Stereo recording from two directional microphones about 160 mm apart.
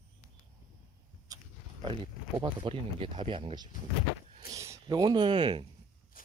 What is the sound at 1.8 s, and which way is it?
Speech, 30° right (ahead or behind).